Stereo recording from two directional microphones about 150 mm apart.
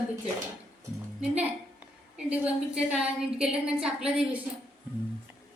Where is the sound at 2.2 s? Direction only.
10° right (ahead or behind).